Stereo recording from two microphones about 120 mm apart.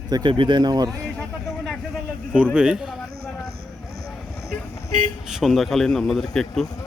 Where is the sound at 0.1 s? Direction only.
40° right (ahead or behind).